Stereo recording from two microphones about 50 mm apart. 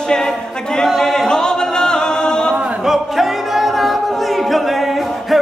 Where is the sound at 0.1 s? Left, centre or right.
Centre.